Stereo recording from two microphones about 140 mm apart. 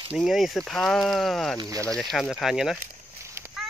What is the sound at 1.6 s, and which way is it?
Speech, 25° right (ahead or behind).